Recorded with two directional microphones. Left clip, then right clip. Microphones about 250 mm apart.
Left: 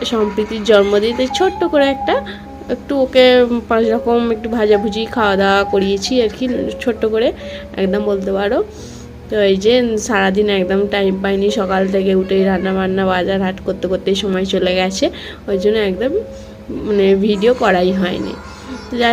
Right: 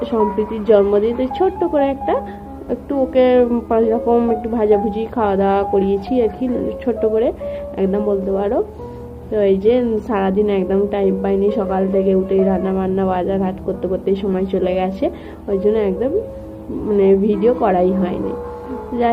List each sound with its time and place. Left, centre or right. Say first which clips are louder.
0.0 s a woman's voice: left 1 dB; left